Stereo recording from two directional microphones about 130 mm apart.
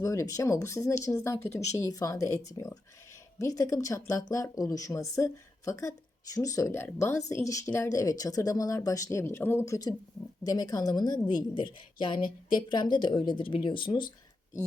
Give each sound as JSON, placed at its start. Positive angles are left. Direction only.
{"t": 0.0, "sound": "a woman's voice", "side_deg": 25}